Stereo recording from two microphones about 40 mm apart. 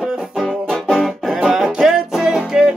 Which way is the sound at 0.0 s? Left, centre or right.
Centre.